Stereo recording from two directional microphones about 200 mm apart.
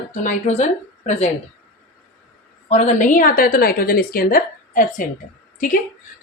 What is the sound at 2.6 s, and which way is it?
A woman's voice, 35° left (ahead or behind).